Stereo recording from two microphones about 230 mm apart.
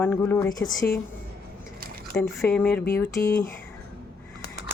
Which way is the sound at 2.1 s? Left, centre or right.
Centre.